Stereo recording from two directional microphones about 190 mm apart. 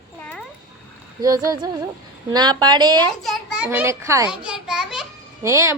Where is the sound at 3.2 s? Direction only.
Centre (ahead or behind); by 4.3 s 15° right (ahead or behind).